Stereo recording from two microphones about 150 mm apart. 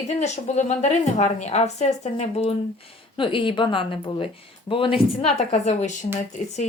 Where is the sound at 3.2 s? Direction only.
35° left (ahead or behind).